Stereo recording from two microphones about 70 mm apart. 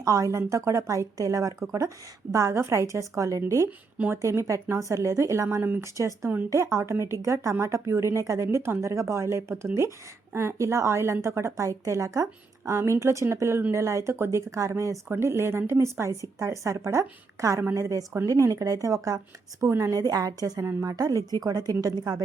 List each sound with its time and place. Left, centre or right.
0.0 s a woman's voice: right
5.8 s a woman's voice: right
6.2 s speech: right
6.5 s a woman's voice: right
19.5 s speech: right
19.9 s a woman's voice: right